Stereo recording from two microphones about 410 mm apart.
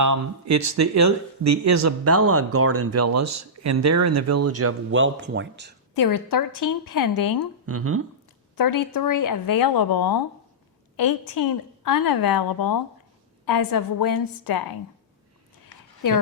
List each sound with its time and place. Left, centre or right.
0.0 s speech: right
5.9 s a woman's voice: left
7.7 s speech: right
8.5 s a woman's voice: left
16.0 s speech: left